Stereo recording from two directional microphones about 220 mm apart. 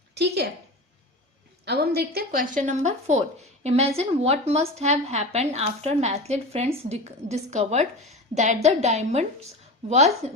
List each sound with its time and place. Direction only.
0.1 s a woman's voice: 50° right (ahead or behind)
1.6 s a woman's voice: 45° right (ahead or behind); by 9.2 s 30° right (ahead or behind)
10.2 s a woman's voice: 30° right (ahead or behind)